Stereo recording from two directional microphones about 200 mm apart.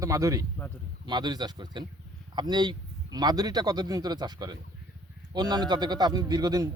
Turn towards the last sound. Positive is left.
turn(degrees=-20)  # may be behind; listen again after turning